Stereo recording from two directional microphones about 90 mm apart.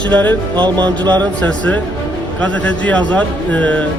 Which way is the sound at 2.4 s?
15° left (ahead or behind).